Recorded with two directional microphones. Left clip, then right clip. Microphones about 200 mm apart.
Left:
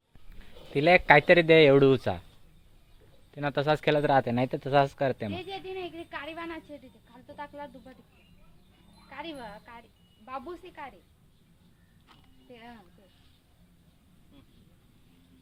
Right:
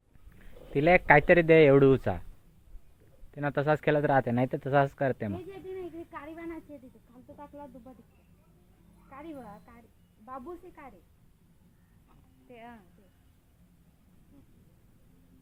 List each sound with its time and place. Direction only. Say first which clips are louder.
0.3 s speech: left 1 dB; 5° left (ahead or behind)
3.3 s speech: left 1 dB; 10° left (ahead or behind)
6.1 s speech: left 5 dB; 10° right (ahead or behind)
7.3 s speech: left 6 dB; 15° right (ahead or behind)
10.2 s speech: left 3 dB; 25° right (ahead or behind)
12.5 s speech: even; centre (ahead or behind)